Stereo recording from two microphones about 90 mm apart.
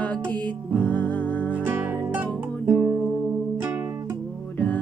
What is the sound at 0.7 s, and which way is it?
Music, 15° left (ahead or behind).